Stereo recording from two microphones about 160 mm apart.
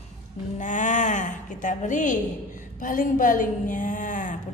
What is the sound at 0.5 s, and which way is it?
A woman's voice, 50° left (ahead or behind).